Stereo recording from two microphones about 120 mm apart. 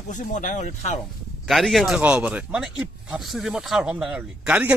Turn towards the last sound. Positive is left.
turn(degrees=-10)  # may be behind; listen again after turning